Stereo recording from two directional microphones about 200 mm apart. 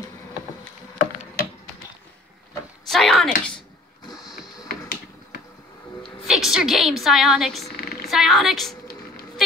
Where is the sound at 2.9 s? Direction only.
Centre (ahead or behind).